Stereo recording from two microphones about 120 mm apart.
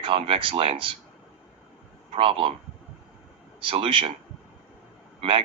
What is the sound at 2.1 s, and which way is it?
Speech, 50° right (ahead or behind).